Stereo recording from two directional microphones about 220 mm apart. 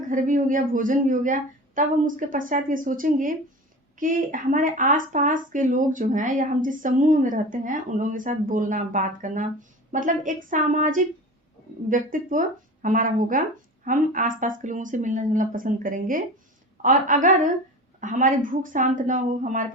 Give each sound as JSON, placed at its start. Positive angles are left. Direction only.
{"t": 0.1, "sound": "speech", "side_deg": -35}